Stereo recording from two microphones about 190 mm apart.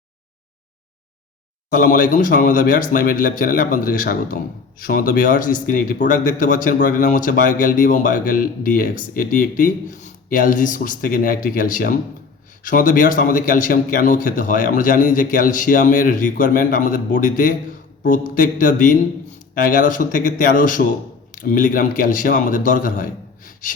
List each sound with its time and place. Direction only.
1.7 s speech: 45° left (ahead or behind)